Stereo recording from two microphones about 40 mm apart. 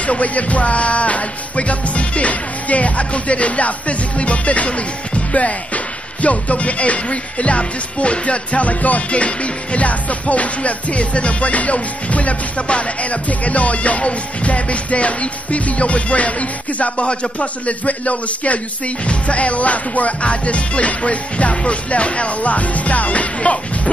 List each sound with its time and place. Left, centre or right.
0.0 s music: left
6.2 s music: left